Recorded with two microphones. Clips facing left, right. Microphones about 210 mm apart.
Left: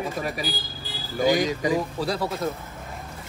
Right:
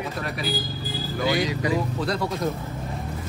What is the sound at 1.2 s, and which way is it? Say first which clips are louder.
Speech: left 3 dB; 45° left (ahead or behind).